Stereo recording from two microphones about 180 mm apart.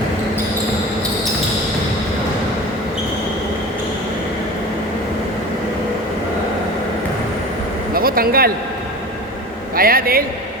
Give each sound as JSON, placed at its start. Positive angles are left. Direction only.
{"t": 7.9, "sound": "speech", "side_deg": -55}
{"t": 9.7, "sound": "a man's voice", "side_deg": -55}